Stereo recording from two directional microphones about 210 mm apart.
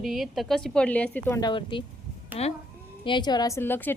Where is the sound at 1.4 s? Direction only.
20° left (ahead or behind).